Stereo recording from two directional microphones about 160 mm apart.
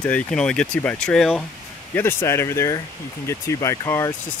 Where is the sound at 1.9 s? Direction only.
15° left (ahead or behind).